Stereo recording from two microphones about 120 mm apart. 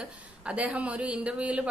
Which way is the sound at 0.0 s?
10° right (ahead or behind).